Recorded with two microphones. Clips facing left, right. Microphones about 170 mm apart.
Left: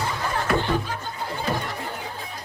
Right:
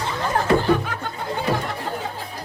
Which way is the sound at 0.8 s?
65° right (ahead or behind).